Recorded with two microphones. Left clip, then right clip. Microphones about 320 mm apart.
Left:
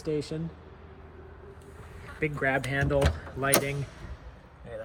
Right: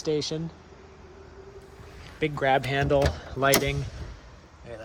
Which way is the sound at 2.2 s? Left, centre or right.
Centre.